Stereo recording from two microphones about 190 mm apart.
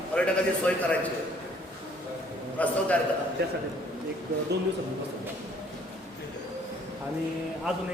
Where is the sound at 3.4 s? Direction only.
60° right (ahead or behind).